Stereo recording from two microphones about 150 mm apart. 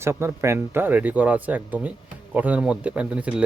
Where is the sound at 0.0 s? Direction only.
15° right (ahead or behind).